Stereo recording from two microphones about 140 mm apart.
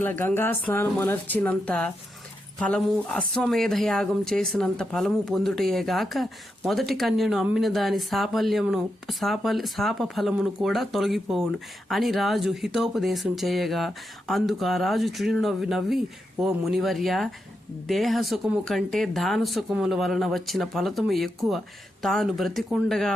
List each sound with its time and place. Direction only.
0.0 s speech: 15° left (ahead or behind)